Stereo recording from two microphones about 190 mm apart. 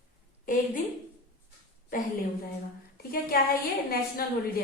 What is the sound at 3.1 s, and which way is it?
A woman's voice, 50° left (ahead or behind).